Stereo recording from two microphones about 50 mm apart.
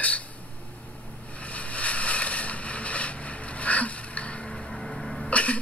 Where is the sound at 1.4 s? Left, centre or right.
Left.